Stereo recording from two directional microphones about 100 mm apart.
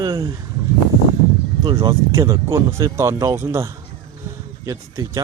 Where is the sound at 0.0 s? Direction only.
35° right (ahead or behind).